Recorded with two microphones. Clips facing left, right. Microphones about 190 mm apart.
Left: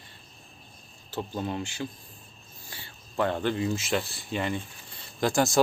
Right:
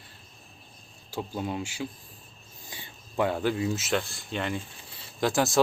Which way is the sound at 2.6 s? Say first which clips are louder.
Right 2 dB; 15° right (ahead or behind).